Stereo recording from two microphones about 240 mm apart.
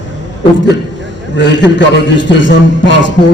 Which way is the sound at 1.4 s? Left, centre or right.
Left.